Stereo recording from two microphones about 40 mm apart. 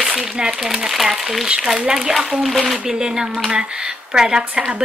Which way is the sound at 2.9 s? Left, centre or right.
Centre.